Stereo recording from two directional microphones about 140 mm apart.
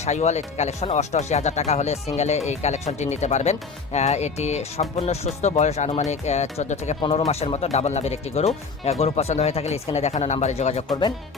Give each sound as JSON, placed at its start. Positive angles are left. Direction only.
{"t": 0.0, "sound": "speech", "side_deg": 55}
{"t": 7.0, "sound": "speech", "side_deg": 35}
{"t": 7.3, "sound": "speech", "side_deg": 45}